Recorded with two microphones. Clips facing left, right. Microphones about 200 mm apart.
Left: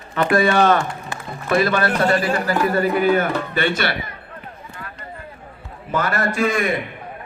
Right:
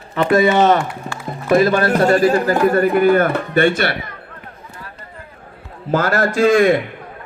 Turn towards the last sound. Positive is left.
turn(degrees=-90)